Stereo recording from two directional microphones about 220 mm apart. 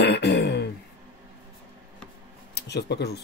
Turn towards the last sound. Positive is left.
turn(degrees=50)  # may be behind; listen again after turning